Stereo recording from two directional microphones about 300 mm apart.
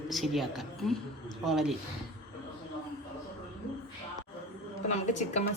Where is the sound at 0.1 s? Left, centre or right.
Centre.